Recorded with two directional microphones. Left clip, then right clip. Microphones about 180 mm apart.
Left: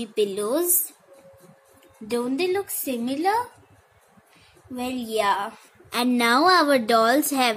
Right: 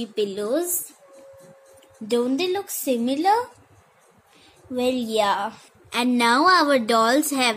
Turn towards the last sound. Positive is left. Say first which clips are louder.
# even
turn(degrees=10)  # may be behind; listen again after turning